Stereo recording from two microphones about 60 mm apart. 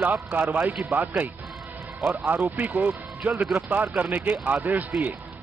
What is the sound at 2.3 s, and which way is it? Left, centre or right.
Speech, right.